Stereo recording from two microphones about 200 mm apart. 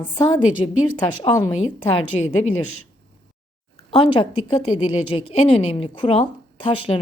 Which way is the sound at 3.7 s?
25° left (ahead or behind).